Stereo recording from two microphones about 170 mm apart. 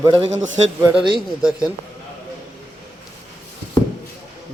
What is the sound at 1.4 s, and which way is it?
Speech, 20° left (ahead or behind).